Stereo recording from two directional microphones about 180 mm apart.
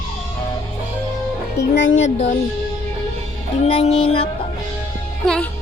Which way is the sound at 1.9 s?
40° left (ahead or behind).